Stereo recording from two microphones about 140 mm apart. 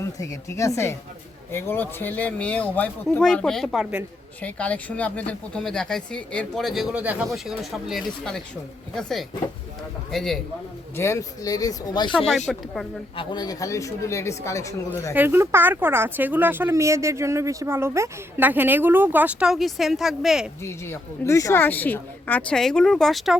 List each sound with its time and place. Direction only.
0.0 s a woman's voice: 20° left (ahead or behind); by 4.0 s centre (ahead or behind)
4.4 s a woman's voice: 10° left (ahead or behind)
6.9 s speech: 10° right (ahead or behind)
10.9 s speech: 20° left (ahead or behind)
12.5 s speech: centre (ahead or behind)
13.1 s speech: 30° left (ahead or behind)
15.1 s speech: 15° right (ahead or behind)
20.6 s a woman's voice: 20° left (ahead or behind); by 23.4 s centre (ahead or behind)